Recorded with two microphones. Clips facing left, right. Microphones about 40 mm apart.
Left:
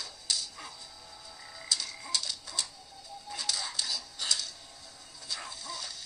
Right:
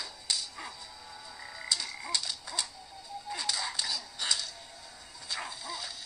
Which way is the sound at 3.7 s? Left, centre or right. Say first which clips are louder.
Right 1 dB; centre.